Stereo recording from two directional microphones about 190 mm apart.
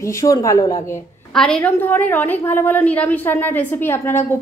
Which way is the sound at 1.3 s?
5° left (ahead or behind).